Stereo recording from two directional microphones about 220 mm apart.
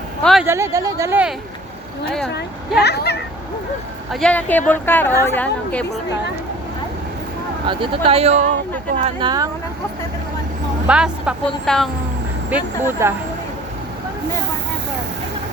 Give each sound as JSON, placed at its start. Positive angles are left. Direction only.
{"t": 0.2, "sound": "speech", "side_deg": 0}
{"t": 0.4, "sound": "speech", "side_deg": -10}
{"t": 2.3, "sound": "speech", "side_deg": 50}
{"t": 4.1, "sound": "a woman's voice", "side_deg": 5}
{"t": 7.7, "sound": "speech", "side_deg": -25}
{"t": 9.0, "sound": "speech", "side_deg": -20}
{"t": 10.8, "sound": "a woman's voice", "side_deg": -5}
{"t": 12.5, "sound": "speech", "side_deg": -10}